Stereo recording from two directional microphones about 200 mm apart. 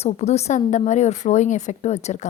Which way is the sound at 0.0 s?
30° left (ahead or behind).